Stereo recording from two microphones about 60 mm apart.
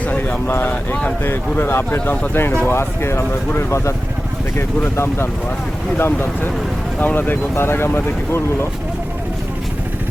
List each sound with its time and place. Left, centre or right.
0.0 s a sound: left
0.6 s speech: left
1.2 s speech: left
4.9 s speech: left
7.5 s speech: left